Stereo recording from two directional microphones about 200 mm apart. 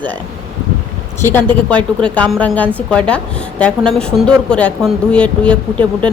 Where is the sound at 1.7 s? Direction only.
5° left (ahead or behind).